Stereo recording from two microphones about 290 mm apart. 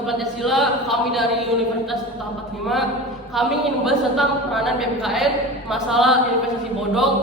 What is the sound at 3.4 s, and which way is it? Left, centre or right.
A man's voice, centre.